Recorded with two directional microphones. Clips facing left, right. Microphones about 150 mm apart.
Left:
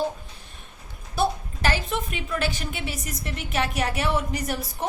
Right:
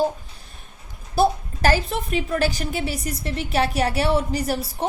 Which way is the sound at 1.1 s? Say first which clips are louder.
Right 5 dB; 40° right (ahead or behind).